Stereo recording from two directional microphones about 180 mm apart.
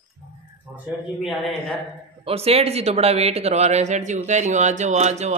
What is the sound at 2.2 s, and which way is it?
Speech, 35° right (ahead or behind).